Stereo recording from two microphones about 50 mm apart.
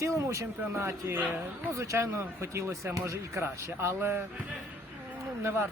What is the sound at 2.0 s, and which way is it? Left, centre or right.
Speech, right.